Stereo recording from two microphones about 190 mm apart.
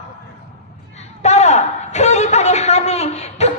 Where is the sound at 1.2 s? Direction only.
35° left (ahead or behind).